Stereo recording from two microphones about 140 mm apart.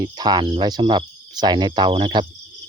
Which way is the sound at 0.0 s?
30° right (ahead or behind).